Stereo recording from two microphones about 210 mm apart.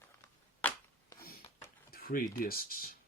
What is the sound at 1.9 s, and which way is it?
Speech, 45° left (ahead or behind).